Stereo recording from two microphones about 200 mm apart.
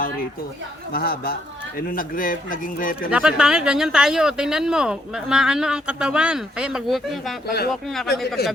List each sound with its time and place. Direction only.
0.9 s speech: 50° left (ahead or behind)
3.1 s speech: 5° right (ahead or behind)
7.4 s speech: 50° left (ahead or behind)
7.7 s speech: centre (ahead or behind)